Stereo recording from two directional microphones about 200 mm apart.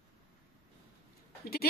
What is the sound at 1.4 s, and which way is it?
Speech, 50° left (ahead or behind).